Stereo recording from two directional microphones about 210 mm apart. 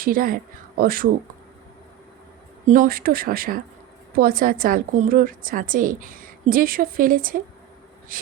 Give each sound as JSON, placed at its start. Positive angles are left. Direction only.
{"t": 0.0, "sound": "speech", "side_deg": -40}
{"t": 2.6, "sound": "a woman's voice", "side_deg": -40}